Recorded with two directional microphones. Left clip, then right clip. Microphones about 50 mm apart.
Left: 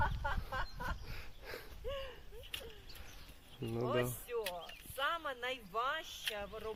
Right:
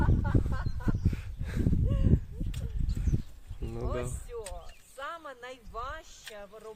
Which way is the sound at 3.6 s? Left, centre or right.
Centre.